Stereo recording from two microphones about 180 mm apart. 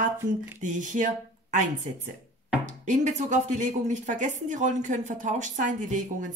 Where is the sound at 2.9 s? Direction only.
40° right (ahead or behind).